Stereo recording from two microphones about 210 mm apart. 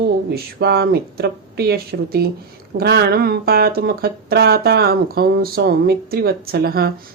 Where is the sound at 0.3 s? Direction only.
50° right (ahead or behind).